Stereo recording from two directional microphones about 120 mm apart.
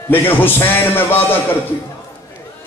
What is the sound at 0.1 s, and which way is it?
A man's voice, 15° left (ahead or behind).